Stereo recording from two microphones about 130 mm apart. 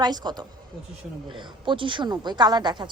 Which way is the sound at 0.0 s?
30° right (ahead or behind).